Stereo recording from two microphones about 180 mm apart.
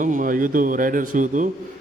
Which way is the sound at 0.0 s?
45° right (ahead or behind).